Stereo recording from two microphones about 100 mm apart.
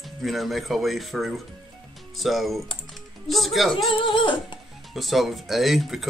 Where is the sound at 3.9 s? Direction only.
55° left (ahead or behind).